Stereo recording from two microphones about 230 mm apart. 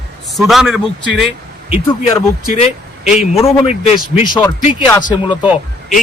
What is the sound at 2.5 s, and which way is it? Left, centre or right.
Speech, left.